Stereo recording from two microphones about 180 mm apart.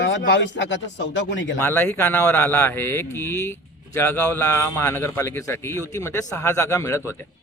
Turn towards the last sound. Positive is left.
turn(degrees=15)  # may be behind; listen again after turning